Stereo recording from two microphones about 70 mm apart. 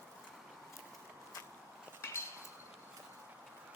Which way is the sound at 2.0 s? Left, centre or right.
Left.